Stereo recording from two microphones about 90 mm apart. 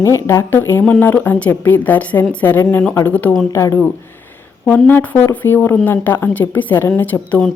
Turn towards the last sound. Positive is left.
turn(degrees=15)  # may be behind; listen again after turning